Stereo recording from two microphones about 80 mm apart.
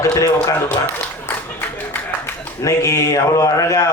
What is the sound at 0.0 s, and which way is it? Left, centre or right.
Speech, left.